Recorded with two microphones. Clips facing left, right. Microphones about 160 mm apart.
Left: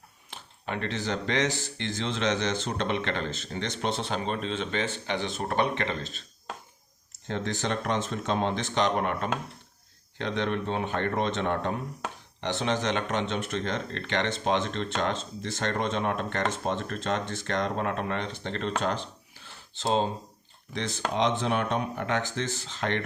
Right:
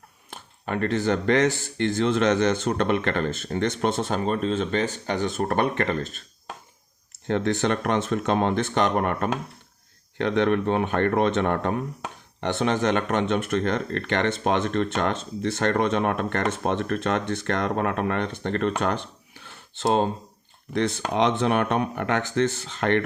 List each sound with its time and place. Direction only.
0.3 s speech: 50° right (ahead or behind)
7.3 s speech: 60° right (ahead or behind)
18.8 s a sound: 60° right (ahead or behind)
21.1 s speech: 65° right (ahead or behind)